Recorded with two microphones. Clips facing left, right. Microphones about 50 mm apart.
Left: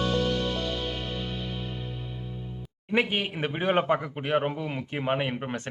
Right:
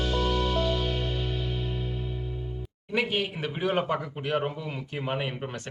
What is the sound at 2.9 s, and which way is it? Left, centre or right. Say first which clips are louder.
Speech: left 1 dB; left.